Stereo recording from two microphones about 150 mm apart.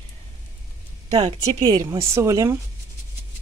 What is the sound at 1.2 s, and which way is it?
Speech, 50° right (ahead or behind).